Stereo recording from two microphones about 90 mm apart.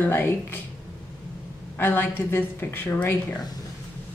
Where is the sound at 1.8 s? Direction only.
25° left (ahead or behind).